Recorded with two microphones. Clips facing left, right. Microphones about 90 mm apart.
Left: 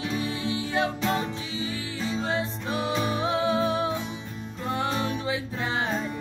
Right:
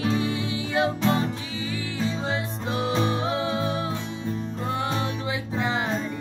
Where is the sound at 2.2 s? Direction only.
20° right (ahead or behind).